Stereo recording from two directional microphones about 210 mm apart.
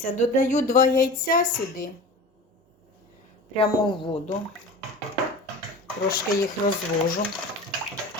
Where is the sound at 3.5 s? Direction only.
20° left (ahead or behind).